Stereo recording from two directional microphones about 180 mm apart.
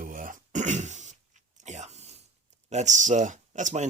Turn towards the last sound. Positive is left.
turn(degrees=-40)  # may be behind; listen again after turning